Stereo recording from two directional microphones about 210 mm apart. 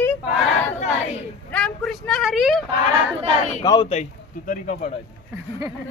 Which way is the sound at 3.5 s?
15° left (ahead or behind).